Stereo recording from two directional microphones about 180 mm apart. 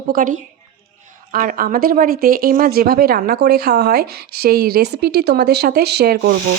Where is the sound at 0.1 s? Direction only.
50° right (ahead or behind); by 6.3 s 65° right (ahead or behind).